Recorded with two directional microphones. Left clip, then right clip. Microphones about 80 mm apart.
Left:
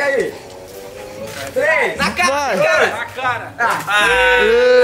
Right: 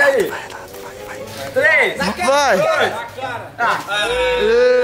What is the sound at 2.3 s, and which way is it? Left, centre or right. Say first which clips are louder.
Speech: right 4 dB; centre.